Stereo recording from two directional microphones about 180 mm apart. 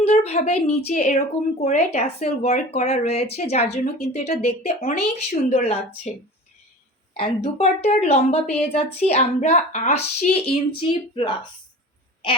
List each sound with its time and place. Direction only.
0.0 s a woman's voice: 35° left (ahead or behind)
7.2 s a woman's voice: 35° left (ahead or behind)